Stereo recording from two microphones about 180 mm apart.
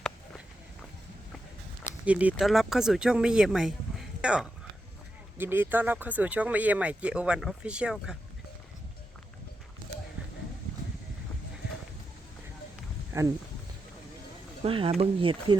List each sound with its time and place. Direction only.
2.0 s speech: 10° right (ahead or behind)
13.1 s speech: 15° right (ahead or behind)
14.6 s speech: 30° right (ahead or behind)